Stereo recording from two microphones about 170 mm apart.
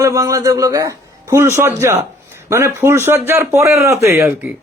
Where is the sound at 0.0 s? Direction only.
20° right (ahead or behind).